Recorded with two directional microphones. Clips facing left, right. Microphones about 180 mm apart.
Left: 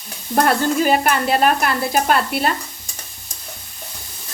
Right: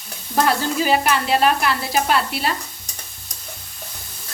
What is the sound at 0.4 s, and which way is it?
Speech, 50° left (ahead or behind).